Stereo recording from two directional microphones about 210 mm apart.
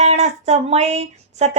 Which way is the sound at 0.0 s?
30° right (ahead or behind).